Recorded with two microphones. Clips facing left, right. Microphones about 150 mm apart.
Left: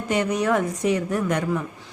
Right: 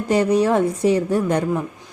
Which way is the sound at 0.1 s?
35° right (ahead or behind).